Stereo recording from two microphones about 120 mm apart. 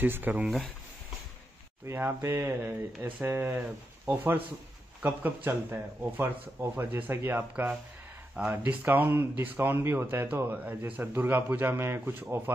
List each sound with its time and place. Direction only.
0.0 s speech: 15° right (ahead or behind)
1.9 s speech: 20° right (ahead or behind)